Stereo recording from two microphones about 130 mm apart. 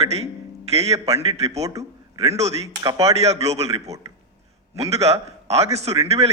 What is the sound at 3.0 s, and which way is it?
A man's voice, 55° right (ahead or behind).